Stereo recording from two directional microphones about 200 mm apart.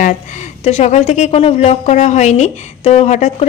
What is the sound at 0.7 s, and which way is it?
A woman's voice, 35° left (ahead or behind).